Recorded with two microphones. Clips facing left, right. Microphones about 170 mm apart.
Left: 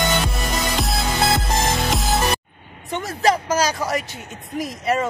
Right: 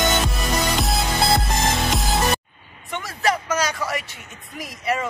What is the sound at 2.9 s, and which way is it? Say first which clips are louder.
Speech: left 4 dB; 35° left (ahead or behind).